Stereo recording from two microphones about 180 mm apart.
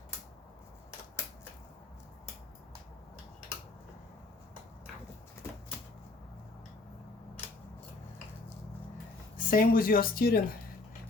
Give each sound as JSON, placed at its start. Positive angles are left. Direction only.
{"t": 9.4, "sound": "speech", "side_deg": 50}